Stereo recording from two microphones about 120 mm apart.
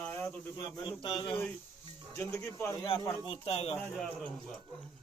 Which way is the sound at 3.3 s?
55° left (ahead or behind).